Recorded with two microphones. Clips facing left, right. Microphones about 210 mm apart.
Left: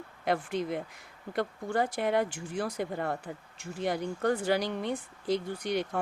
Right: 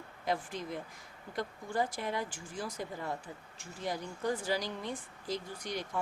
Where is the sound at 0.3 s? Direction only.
65° left (ahead or behind).